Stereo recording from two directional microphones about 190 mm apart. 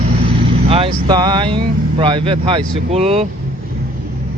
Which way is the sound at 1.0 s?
25° right (ahead or behind).